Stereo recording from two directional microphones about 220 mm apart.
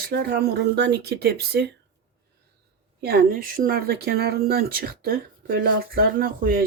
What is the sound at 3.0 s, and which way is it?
Speech, 45° right (ahead or behind).